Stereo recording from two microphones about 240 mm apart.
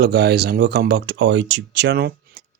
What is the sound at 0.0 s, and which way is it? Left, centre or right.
Speech, right.